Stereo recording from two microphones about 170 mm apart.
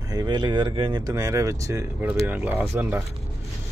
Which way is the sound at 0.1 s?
25° right (ahead or behind).